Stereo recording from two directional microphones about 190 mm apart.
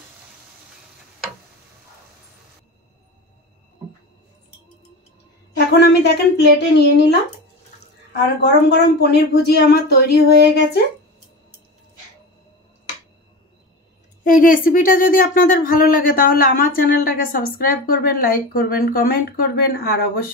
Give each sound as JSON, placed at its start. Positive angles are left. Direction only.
{"t": 5.8, "sound": "speech", "side_deg": 60}
{"t": 8.4, "sound": "speech", "side_deg": 60}
{"t": 14.2, "sound": "speech", "side_deg": 45}